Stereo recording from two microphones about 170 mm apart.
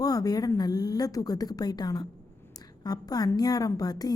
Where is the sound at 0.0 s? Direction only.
20° left (ahead or behind).